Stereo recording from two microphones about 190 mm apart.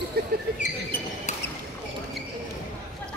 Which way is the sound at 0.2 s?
55° right (ahead or behind).